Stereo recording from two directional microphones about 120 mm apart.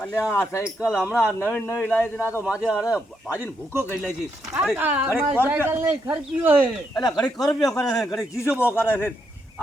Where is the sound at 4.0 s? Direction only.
5° right (ahead or behind).